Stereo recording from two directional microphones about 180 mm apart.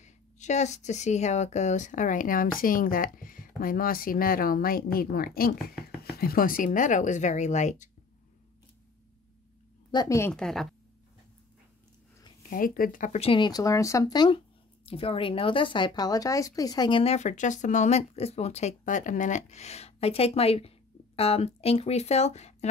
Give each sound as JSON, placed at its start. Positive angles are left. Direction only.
{"t": 0.0, "sound": "speech", "side_deg": 40}
{"t": 9.8, "sound": "speech", "side_deg": 20}
{"t": 10.3, "sound": "a woman's voice", "side_deg": 0}
{"t": 12.4, "sound": "speech", "side_deg": 50}